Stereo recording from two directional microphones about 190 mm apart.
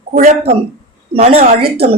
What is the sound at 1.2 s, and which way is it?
Speech, 30° right (ahead or behind).